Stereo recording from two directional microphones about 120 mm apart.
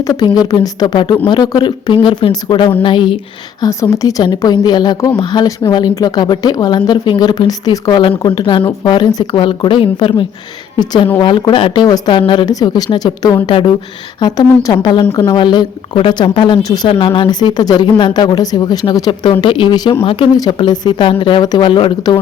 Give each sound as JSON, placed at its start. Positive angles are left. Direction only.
{"t": 0.0, "sound": "speech", "side_deg": 30}
{"t": 3.6, "sound": "a woman's voice", "side_deg": 25}
{"t": 14.2, "sound": "speech", "side_deg": 30}